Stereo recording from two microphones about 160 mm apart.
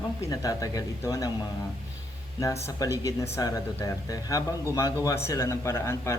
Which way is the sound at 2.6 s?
20° left (ahead or behind).